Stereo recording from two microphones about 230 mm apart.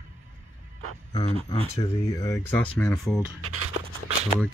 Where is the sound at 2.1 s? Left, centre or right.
Centre.